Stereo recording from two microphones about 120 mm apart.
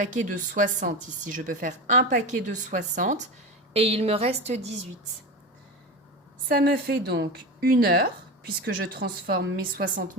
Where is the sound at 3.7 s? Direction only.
55° right (ahead or behind).